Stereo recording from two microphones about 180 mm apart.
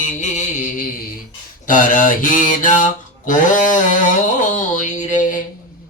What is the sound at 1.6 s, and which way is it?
Mantra, 45° left (ahead or behind).